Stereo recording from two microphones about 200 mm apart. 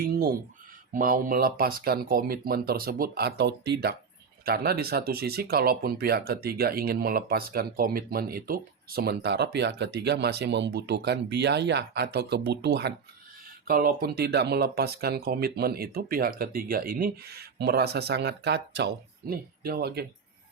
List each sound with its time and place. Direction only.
0.0 s a sound: 50° right (ahead or behind)
0.9 s speech: 45° right (ahead or behind)
13.7 s speech: 45° right (ahead or behind)